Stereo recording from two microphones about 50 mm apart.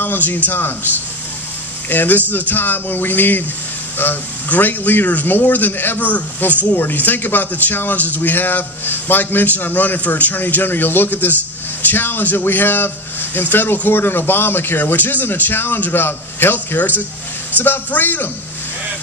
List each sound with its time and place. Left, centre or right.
0.0 s a man's voice: left
1.9 s a man's voice: left
16.5 s a man's voice: left